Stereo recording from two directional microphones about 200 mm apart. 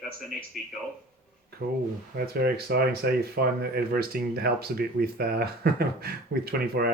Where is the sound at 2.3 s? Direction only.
50° right (ahead or behind).